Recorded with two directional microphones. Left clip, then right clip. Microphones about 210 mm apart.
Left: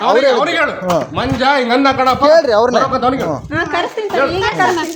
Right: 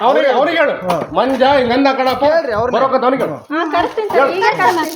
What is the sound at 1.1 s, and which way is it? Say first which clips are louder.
Speech: right 5 dB; 30° left (ahead or behind).